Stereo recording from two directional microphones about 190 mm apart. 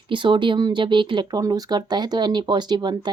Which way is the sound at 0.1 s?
25° right (ahead or behind).